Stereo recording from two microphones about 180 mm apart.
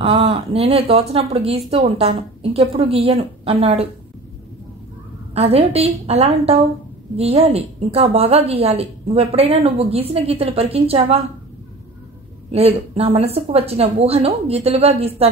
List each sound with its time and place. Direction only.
0.0 s a woman's voice: 35° right (ahead or behind)
5.3 s a woman's voice: 35° right (ahead or behind)
12.4 s a woman's voice: 35° right (ahead or behind)